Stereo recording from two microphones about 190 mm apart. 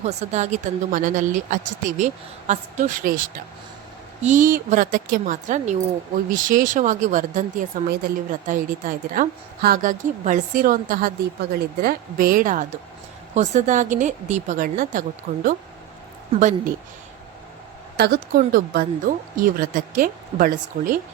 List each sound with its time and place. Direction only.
0.0 s a woman's voice: 35° right (ahead or behind); by 15.4 s 50° right (ahead or behind)
16.3 s a woman's voice: 40° right (ahead or behind)
17.9 s a woman's voice: 60° right (ahead or behind)